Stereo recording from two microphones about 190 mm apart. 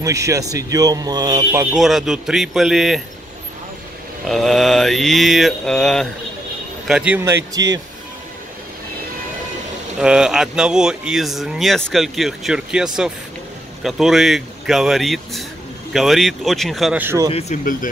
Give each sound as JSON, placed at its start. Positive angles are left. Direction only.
{"t": 0.0, "sound": "speech", "side_deg": -15}
{"t": 1.7, "sound": "speech", "side_deg": 0}
{"t": 4.3, "sound": "speech", "side_deg": 0}
{"t": 9.9, "sound": "speech", "side_deg": -5}
{"t": 17.0, "sound": "speech", "side_deg": -15}
{"t": 17.3, "sound": "speech", "side_deg": 35}